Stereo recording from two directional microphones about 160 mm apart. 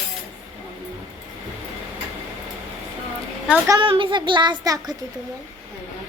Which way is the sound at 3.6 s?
30° right (ahead or behind).